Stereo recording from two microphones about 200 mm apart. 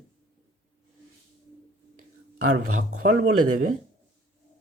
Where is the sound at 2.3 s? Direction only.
90° right.